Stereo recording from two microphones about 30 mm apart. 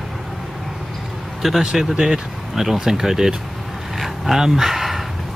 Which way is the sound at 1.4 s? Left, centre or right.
Centre.